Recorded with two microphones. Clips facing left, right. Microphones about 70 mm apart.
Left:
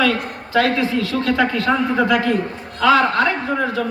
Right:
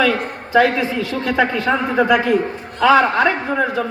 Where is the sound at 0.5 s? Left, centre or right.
Centre.